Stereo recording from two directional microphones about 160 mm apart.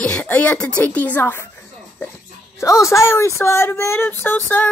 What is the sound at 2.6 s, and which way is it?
Speech, 20° left (ahead or behind).